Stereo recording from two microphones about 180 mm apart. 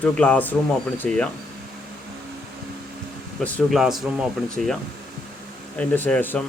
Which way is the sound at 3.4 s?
10° left (ahead or behind).